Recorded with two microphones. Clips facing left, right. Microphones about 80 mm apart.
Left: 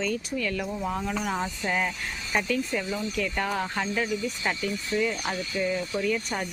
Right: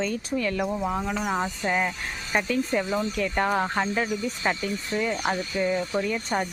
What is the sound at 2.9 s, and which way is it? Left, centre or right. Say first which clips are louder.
Speech: right 3 dB; right.